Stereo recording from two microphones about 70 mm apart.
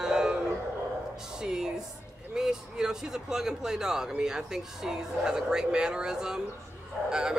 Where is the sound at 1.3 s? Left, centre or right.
Centre.